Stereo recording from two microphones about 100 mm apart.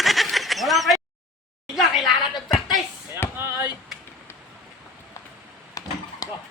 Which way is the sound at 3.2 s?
20° left (ahead or behind).